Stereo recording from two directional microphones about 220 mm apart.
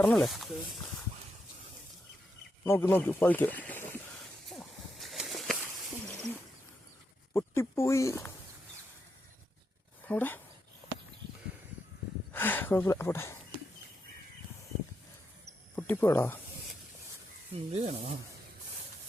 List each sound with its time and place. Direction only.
0.0 s speech: centre (ahead or behind)
2.6 s speech: 10° left (ahead or behind)
4.5 s a sound: centre (ahead or behind)
7.3 s speech: 10° left (ahead or behind)
10.1 s speech: 10° left (ahead or behind)
12.3 s speech: 10° left (ahead or behind)
15.7 s speech: 10° left (ahead or behind)
17.5 s speech: 30° right (ahead or behind)